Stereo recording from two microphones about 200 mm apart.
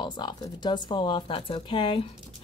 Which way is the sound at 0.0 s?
20° left (ahead or behind).